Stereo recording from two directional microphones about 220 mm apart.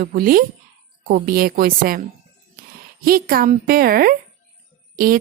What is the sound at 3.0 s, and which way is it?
Speech, 40° right (ahead or behind).